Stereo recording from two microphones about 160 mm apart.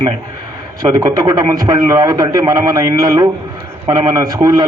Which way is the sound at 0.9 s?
25° right (ahead or behind).